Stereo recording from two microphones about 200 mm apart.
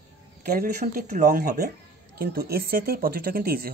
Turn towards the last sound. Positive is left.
turn(degrees=-50)  # may be behind; listen again after turning